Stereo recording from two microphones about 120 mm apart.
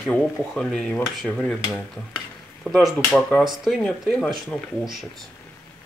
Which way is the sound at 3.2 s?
5° left (ahead or behind).